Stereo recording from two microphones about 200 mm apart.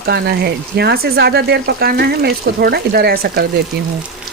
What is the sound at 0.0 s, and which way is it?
Speech, 50° right (ahead or behind).